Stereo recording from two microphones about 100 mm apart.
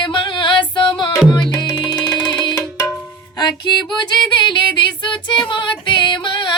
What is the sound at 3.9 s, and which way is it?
Female singing, 50° left (ahead or behind).